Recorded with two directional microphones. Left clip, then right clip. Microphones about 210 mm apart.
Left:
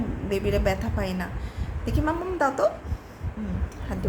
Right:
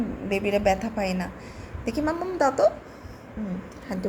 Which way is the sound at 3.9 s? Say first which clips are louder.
Right 2 dB; 5° right (ahead or behind).